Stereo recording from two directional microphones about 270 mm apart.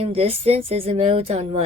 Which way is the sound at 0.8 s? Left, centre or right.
Right.